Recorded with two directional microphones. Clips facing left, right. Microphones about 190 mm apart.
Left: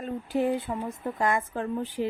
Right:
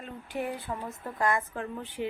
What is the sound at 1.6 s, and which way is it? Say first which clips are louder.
Speech: left 6 dB; 35° left (ahead or behind).